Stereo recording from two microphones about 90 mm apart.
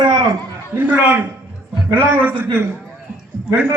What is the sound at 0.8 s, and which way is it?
A man's voice, 15° right (ahead or behind).